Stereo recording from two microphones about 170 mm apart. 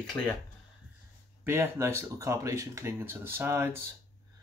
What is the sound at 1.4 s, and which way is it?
Speech, 15° right (ahead or behind).